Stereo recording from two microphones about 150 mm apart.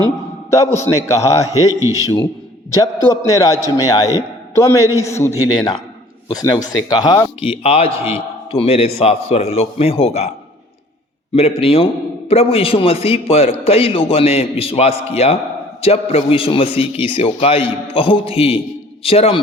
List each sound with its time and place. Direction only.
0.5 s a man's voice: 20° left (ahead or behind)
1.8 s a man's voice: 25° right (ahead or behind)
2.7 s a man's voice: 20° left (ahead or behind)
7.4 s a man's voice: 40° left (ahead or behind)
11.3 s a man's voice: 40° left (ahead or behind)